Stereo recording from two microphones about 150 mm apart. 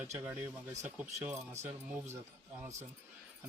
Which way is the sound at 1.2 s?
45° right (ahead or behind).